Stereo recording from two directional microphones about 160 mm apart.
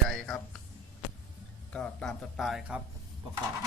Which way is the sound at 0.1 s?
5° left (ahead or behind).